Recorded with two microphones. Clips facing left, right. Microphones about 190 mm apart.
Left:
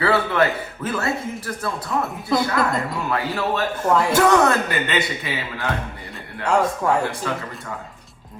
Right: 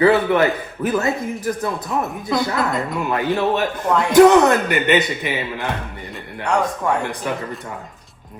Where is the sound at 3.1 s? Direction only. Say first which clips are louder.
Right 5 dB; 20° right (ahead or behind).